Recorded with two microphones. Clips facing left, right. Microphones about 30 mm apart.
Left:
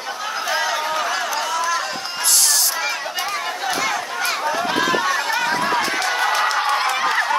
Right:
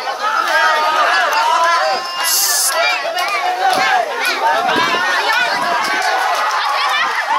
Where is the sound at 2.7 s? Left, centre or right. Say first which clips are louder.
Right 8 dB; right.